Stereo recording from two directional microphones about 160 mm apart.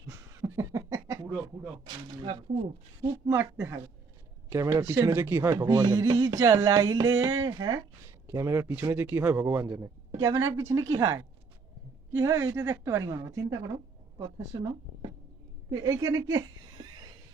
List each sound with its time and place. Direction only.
0.1 s a sound: 15° right (ahead or behind)
3.1 s a woman's voice: 20° right (ahead or behind)
15.7 s a woman's voice: 20° right (ahead or behind)